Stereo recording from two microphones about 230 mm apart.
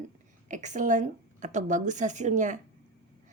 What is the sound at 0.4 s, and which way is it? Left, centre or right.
A woman's voice, right.